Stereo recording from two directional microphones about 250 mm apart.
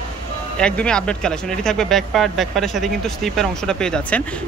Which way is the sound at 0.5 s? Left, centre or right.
Centre.